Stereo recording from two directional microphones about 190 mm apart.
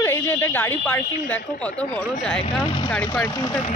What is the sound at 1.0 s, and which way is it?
Speech, 45° left (ahead or behind).